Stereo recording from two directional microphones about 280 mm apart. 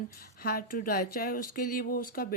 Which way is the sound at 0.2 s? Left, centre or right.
Left.